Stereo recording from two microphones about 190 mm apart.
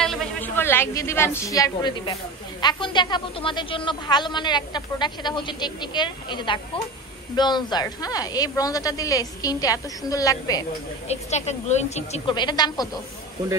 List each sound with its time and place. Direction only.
0.0 s a woman's voice: 5° left (ahead or behind)
11.1 s a woman's voice: 35° left (ahead or behind)
12.4 s a woman's voice: 20° left (ahead or behind)